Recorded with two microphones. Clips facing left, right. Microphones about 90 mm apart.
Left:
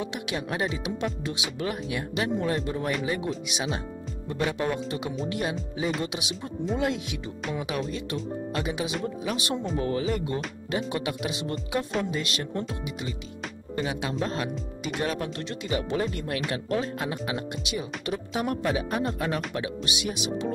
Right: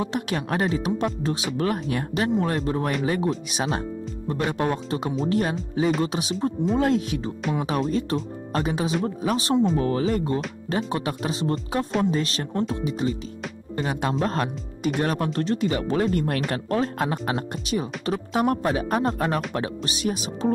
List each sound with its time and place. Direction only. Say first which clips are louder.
0.0 s speech: right 5 dB; 45° right (ahead or behind)